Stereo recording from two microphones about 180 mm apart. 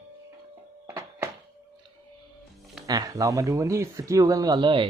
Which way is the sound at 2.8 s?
20° right (ahead or behind).